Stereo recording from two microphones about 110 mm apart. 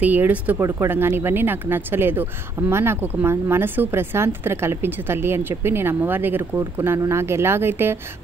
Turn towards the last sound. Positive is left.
turn(degrees=-20)  # may be behind; listen again after turning